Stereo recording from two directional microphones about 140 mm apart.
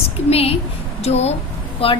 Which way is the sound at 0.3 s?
45° left (ahead or behind).